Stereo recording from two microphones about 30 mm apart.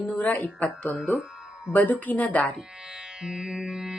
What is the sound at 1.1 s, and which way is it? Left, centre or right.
Music, right.